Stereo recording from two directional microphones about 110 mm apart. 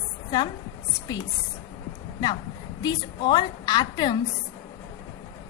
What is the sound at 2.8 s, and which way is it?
A woman's voice, 40° left (ahead or behind).